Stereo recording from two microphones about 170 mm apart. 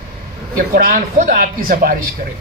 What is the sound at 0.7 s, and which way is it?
A woman's voice, 60° right (ahead or behind).